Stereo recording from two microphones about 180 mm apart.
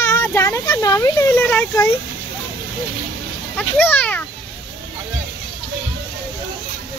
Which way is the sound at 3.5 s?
10° left (ahead or behind).